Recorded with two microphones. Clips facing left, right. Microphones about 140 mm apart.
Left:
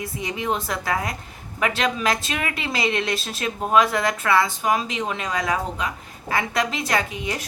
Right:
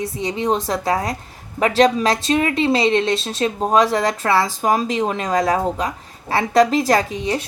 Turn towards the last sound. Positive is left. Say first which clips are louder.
# right 5 dB
turn(degrees=-30)  # may be behind; listen again after turning